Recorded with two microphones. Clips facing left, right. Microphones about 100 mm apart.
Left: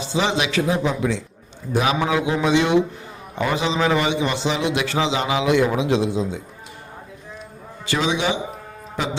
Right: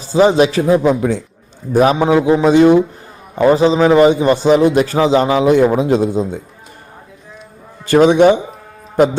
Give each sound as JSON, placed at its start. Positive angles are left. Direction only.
{"t": 0.1, "sound": "a man's voice", "side_deg": -40}
{"t": 7.9, "sound": "a man's voice", "side_deg": -50}